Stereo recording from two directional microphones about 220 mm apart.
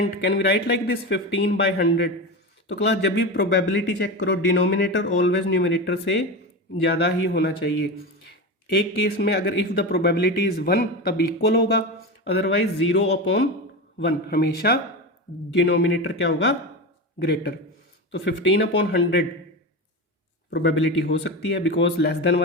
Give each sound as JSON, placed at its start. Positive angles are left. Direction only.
{"t": 0.2, "sound": "speech", "side_deg": 50}
{"t": 20.5, "sound": "speech", "side_deg": 50}